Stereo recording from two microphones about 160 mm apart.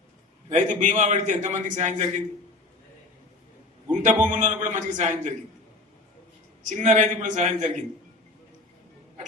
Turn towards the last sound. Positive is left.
turn(degrees=-50)  # may be behind; listen again after turning